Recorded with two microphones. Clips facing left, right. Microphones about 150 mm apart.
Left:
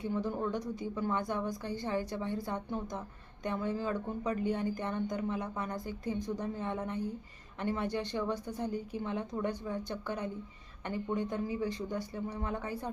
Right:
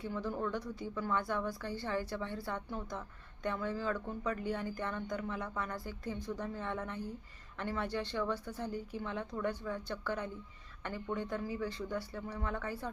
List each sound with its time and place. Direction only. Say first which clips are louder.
0.0 s speech: left 3 dB; 20° left (ahead or behind)